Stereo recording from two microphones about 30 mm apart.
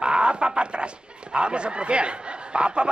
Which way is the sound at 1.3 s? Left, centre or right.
Right.